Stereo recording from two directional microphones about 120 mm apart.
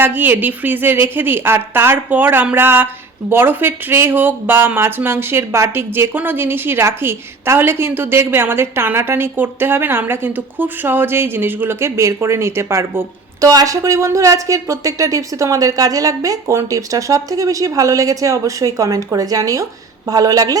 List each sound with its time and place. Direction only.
0.0 s a woman's voice: 15° right (ahead or behind); by 20.6 s 30° right (ahead or behind)